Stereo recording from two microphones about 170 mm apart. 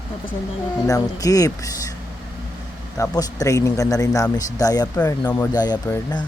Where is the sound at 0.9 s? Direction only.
20° left (ahead or behind).